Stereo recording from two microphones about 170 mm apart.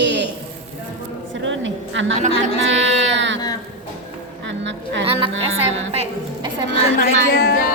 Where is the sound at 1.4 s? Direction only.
90° right.